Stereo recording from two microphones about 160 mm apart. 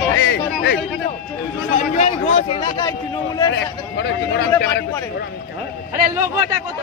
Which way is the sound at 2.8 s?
25° left (ahead or behind).